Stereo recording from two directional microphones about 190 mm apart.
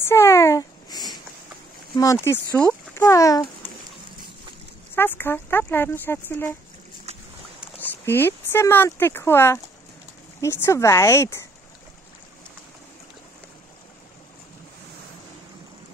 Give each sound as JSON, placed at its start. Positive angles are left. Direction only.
{"t": 0.0, "sound": "a sound", "side_deg": 15}
{"t": 2.2, "sound": "speech", "side_deg": 10}
{"t": 4.9, "sound": "speech", "side_deg": 10}
{"t": 7.1, "sound": "boat", "side_deg": -35}
{"t": 7.8, "sound": "speech", "side_deg": 10}